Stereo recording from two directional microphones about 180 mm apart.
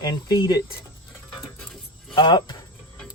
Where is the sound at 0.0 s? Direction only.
25° left (ahead or behind).